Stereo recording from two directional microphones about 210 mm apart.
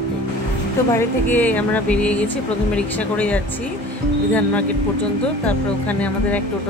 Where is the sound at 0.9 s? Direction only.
10° left (ahead or behind).